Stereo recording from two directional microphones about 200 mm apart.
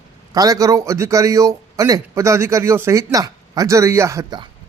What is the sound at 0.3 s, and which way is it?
A man's voice, 15° right (ahead or behind).